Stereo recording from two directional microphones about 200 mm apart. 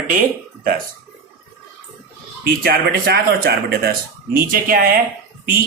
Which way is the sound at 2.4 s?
50° right (ahead or behind).